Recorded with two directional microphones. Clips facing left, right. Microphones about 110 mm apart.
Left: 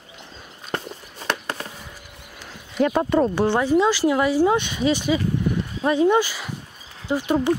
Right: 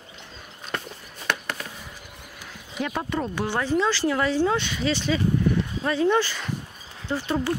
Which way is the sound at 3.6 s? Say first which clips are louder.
Left 2 dB; 15° left (ahead or behind).